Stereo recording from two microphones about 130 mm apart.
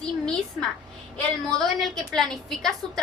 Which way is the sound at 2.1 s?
Centre (ahead or behind).